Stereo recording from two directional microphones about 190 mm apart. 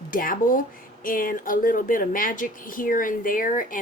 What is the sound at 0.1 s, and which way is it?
Speech, 45° left (ahead or behind).